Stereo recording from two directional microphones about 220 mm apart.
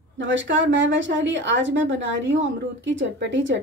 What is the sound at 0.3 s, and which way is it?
Speech, 60° right (ahead or behind).